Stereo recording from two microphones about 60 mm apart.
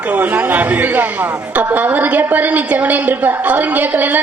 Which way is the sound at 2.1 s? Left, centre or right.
Right.